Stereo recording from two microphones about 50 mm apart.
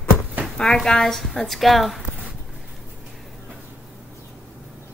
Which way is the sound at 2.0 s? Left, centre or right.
Right.